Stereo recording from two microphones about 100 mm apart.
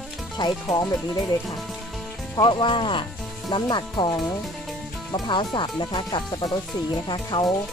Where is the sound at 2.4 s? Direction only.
50° left (ahead or behind).